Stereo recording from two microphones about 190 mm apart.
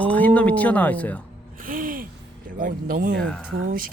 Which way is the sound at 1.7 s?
45° right (ahead or behind).